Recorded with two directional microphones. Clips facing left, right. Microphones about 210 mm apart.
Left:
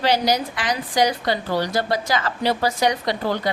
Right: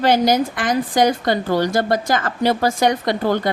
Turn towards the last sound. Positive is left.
turn(degrees=-50)  # may be behind; listen again after turning